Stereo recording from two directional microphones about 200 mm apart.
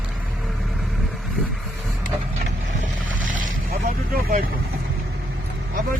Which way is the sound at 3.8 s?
45° right (ahead or behind).